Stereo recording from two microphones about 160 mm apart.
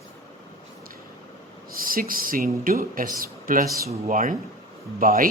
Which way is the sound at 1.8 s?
65° right (ahead or behind).